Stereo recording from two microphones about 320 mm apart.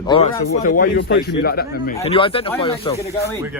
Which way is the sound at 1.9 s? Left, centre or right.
Centre.